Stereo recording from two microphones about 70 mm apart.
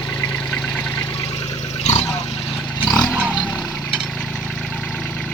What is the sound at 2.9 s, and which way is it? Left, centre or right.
Vehicle, centre.